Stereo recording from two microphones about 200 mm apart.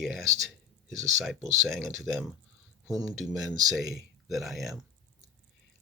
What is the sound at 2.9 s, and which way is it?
Speech, 20° right (ahead or behind).